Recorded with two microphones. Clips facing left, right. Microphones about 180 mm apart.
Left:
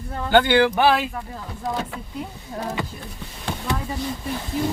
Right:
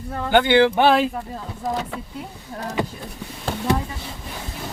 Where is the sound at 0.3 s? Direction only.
20° right (ahead or behind).